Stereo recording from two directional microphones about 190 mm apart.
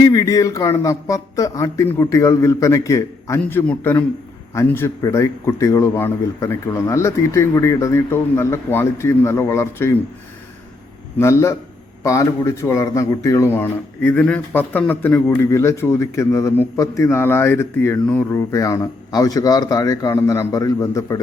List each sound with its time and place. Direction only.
0.0 s speech: 15° left (ahead or behind)
11.2 s speech: 15° left (ahead or behind)